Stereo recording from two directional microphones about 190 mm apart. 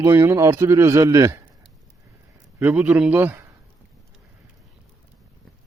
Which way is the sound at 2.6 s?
10° right (ahead or behind).